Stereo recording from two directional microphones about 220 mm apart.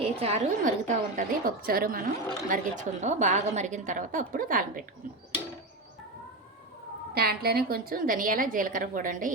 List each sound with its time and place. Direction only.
0.0 s a woman's voice: 25° right (ahead or behind)
7.1 s a woman's voice: 45° right (ahead or behind)